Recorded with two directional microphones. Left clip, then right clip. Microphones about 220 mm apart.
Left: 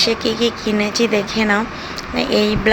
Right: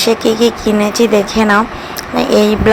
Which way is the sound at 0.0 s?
15° right (ahead or behind).